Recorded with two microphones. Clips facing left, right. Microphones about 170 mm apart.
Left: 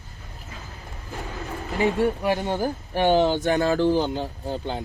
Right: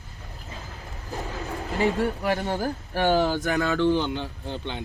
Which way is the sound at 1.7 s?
20° left (ahead or behind).